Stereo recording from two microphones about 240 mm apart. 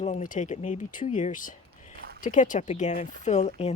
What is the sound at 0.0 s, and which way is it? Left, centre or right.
Speech, left.